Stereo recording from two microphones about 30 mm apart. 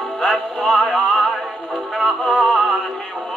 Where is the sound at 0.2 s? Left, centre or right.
Left.